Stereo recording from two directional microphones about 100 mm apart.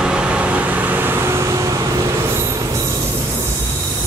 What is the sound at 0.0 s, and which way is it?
Vehicle, 10° right (ahead or behind).